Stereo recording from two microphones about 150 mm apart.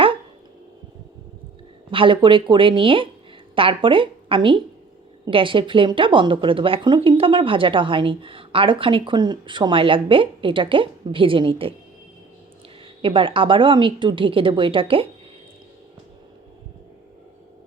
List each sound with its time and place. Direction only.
1.9 s a woman's voice: 35° right (ahead or behind)
12.8 s speech: 35° right (ahead or behind)